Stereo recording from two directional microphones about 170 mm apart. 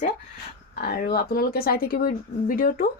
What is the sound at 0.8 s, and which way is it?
A woman's voice, 65° left (ahead or behind).